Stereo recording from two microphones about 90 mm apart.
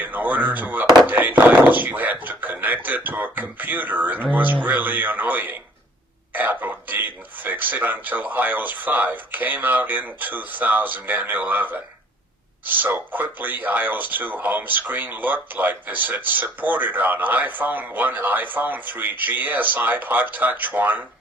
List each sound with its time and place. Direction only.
0.0 s speech: 20° right (ahead or behind)